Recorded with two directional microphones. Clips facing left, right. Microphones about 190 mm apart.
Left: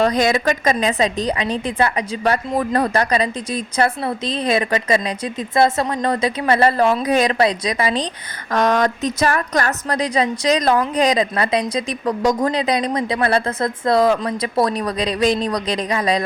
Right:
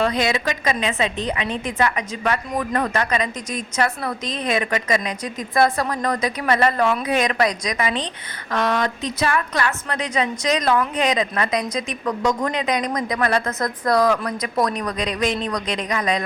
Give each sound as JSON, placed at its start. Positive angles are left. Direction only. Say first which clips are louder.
{"t": 0.0, "sound": "a woman's voice", "louder": "left 4 dB", "side_deg": 45}